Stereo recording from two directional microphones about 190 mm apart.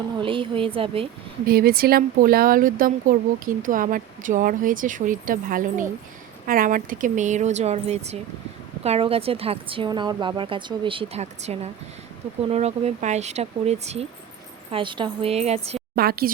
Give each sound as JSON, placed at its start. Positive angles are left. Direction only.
{"t": 0.2, "sound": "speech", "side_deg": -25}
{"t": 1.5, "sound": "speech", "side_deg": -55}
{"t": 16.0, "sound": "speech", "side_deg": -55}